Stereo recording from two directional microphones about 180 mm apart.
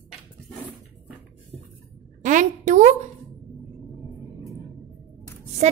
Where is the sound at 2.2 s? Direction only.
45° right (ahead or behind).